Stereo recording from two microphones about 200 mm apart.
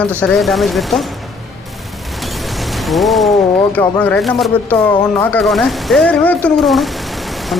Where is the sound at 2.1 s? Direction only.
Centre (ahead or behind).